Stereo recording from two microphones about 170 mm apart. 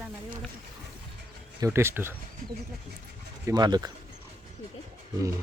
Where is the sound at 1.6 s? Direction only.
15° right (ahead or behind).